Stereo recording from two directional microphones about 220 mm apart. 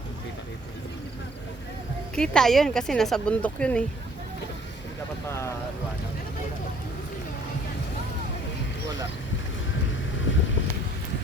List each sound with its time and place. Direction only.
2.1 s speech: 5° left (ahead or behind)
5.3 s speech: 15° left (ahead or behind)
10.3 s vehicle: 55° left (ahead or behind)